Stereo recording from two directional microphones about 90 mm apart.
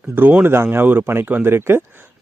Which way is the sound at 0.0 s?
20° right (ahead or behind).